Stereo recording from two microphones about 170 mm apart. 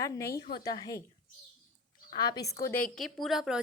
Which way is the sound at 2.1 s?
25° left (ahead or behind).